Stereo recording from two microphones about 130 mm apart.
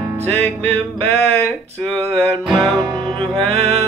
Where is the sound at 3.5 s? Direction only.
55° right (ahead or behind).